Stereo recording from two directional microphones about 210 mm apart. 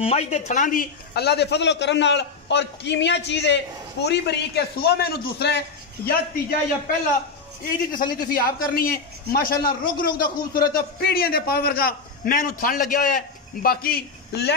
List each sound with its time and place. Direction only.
0.0 s a man's voice: 30° left (ahead or behind); by 5.6 s 50° left (ahead or behind)
7.6 s a man's voice: 40° left (ahead or behind)